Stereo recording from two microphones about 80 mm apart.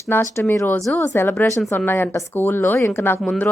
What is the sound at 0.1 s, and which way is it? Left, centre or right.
A woman's voice, left.